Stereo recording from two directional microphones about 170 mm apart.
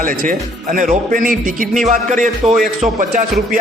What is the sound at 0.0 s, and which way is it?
A man's voice, 50° right (ahead or behind).